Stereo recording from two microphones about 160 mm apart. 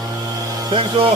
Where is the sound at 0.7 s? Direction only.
35° right (ahead or behind).